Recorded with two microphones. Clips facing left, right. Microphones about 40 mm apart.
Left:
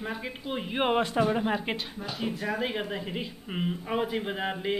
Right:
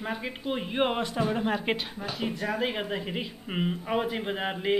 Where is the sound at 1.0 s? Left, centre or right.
Left.